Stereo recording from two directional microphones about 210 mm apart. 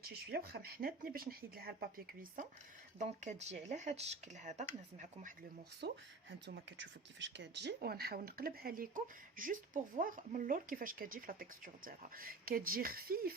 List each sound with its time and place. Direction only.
0.0 s speech: 50° right (ahead or behind)
5.8 s speech: 55° right (ahead or behind)